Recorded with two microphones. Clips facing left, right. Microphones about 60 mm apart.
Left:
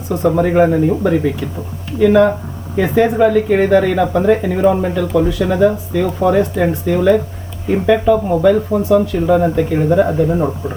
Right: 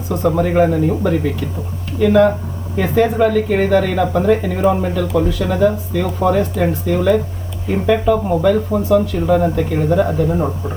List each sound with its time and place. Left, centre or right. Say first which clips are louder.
0.3 s speech: left 2 dB; centre